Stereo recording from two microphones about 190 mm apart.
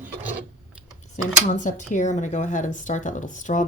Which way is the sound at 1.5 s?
40° left (ahead or behind).